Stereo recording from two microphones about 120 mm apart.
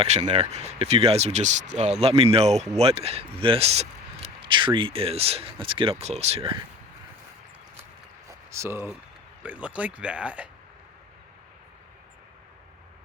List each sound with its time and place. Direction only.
0.0 s speech: 70° right (ahead or behind)
4.4 s speech: 45° right (ahead or behind)
6.0 s speech: 65° right (ahead or behind)
8.3 s a sound: 25° right (ahead or behind)
9.4 s speech: 10° right (ahead or behind)